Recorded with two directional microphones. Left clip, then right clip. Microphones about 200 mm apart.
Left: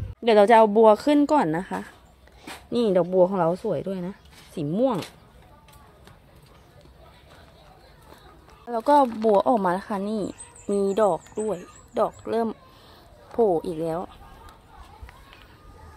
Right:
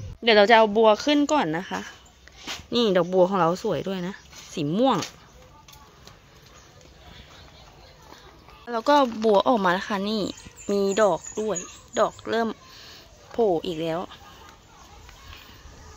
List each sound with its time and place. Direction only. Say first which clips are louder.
0.2 s speech: left 1 dB; 10° left (ahead or behind)
8.6 s speech: left 1 dB; 5° left (ahead or behind)
12.2 s a sound: even; 5° left (ahead or behind)